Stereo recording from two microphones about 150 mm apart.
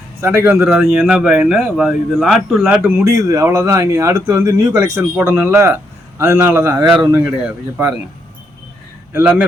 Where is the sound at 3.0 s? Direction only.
20° right (ahead or behind).